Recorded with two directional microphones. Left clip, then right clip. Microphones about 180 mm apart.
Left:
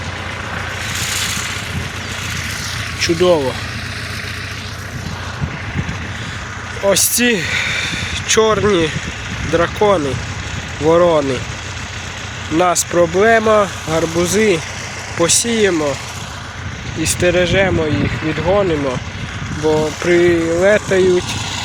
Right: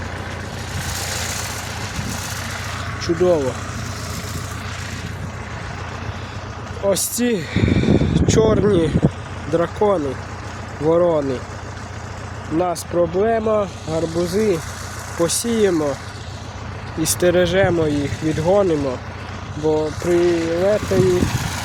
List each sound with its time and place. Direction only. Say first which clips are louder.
0.9 s vehicle: left 6 dB; 40° right (ahead or behind)
3.0 s speech: left 4 dB; centre (ahead or behind)
6.9 s speech: left 9 dB; 5° right (ahead or behind)
9.6 s speech: left 4 dB; 5° right (ahead or behind)
12.5 s speech: left 6 dB; 5° left (ahead or behind)
12.9 s speech: left 5 dB; 20° left (ahead or behind)
15.2 s speech: left 4 dB; 5° right (ahead or behind)
17.0 s speech: left 2 dB; 20° right (ahead or behind)
19.6 s speech: left 4 dB; 35° left (ahead or behind)
20.7 s vehicle: left 4 dB; 25° left (ahead or behind)